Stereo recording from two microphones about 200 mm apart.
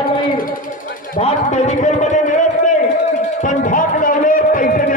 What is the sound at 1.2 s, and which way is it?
A man's voice, 35° left (ahead or behind).